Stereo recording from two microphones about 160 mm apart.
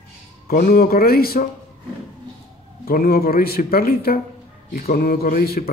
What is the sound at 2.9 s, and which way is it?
Speech, 70° left (ahead or behind).